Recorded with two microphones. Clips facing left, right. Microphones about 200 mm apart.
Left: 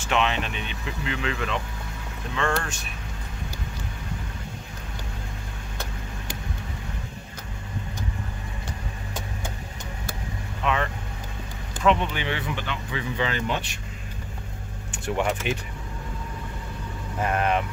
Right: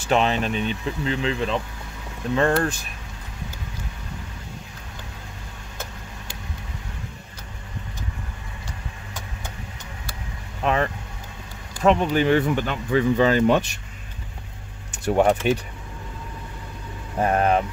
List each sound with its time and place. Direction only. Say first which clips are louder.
0.0 s speech: right 4 dB; 35° right (ahead or behind)
10.6 s speech: right 4 dB; 40° right (ahead or behind)
14.9 s speech: right 7 dB; 40° right (ahead or behind)
17.2 s speech: right 4 dB; 35° right (ahead or behind)